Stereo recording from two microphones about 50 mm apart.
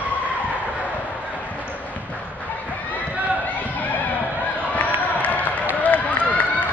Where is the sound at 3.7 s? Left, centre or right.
Left.